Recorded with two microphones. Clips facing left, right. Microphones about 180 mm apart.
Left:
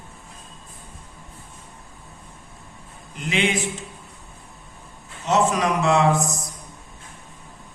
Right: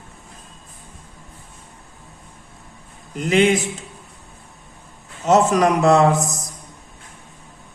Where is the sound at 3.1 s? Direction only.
45° right (ahead or behind).